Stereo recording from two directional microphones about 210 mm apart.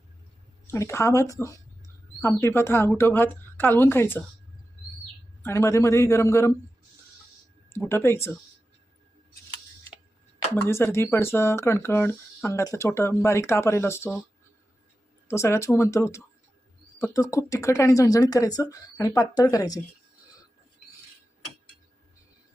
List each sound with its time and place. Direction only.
0.7 s speech: 15° left (ahead or behind)
5.4 s speech: 10° left (ahead or behind)
7.9 s speech: 10° left (ahead or behind)
10.5 s speech: 10° left (ahead or behind)
15.3 s speech: 10° left (ahead or behind)